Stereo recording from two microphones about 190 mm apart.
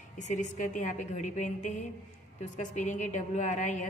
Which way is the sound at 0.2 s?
40° left (ahead or behind).